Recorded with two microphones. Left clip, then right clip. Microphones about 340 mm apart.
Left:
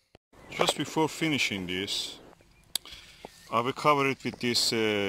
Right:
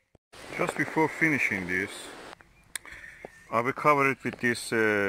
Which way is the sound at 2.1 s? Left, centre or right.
Right.